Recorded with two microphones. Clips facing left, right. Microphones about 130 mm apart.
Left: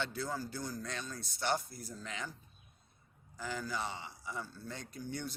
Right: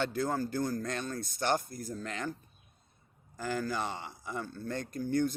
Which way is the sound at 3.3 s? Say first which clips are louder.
Right 6 dB; 50° right (ahead or behind).